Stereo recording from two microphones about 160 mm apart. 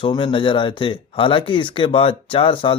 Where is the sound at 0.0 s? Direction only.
30° left (ahead or behind).